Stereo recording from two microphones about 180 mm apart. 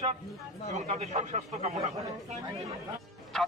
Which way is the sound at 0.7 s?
40° right (ahead or behind).